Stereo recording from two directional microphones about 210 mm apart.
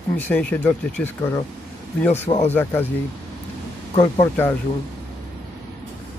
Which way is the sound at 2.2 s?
30° left (ahead or behind).